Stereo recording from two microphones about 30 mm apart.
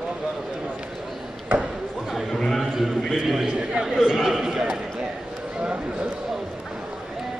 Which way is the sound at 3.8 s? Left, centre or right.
Centre.